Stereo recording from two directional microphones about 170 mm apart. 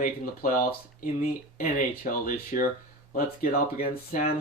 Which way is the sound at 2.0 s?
55° left (ahead or behind).